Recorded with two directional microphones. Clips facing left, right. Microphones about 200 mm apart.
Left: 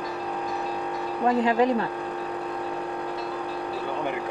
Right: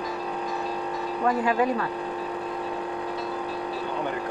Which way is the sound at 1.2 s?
25° left (ahead or behind).